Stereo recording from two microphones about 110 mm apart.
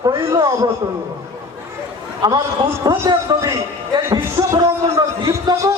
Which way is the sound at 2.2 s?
40° right (ahead or behind).